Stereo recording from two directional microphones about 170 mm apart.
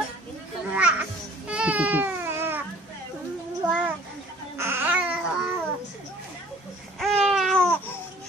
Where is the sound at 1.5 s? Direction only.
5° right (ahead or behind).